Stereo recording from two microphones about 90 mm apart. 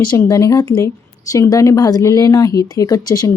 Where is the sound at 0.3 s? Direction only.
35° left (ahead or behind).